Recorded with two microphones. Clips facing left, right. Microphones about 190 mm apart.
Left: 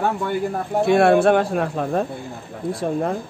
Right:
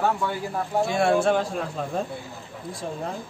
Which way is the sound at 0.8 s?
60° left (ahead or behind).